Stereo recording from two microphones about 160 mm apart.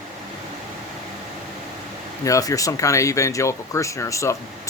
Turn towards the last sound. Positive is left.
turn(degrees=20)  # may be behind; listen again after turning